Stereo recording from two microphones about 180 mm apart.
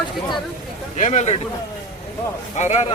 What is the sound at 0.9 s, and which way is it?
Speech, 40° left (ahead or behind).